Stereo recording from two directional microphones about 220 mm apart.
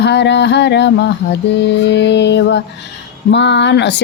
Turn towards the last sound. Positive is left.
turn(degrees=50)  # may be behind; listen again after turning